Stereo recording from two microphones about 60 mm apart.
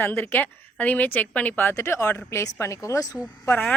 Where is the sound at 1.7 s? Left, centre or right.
Left.